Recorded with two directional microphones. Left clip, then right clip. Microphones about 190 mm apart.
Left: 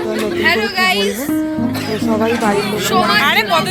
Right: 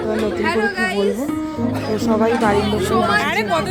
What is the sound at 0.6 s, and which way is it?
Speech, 45° right (ahead or behind).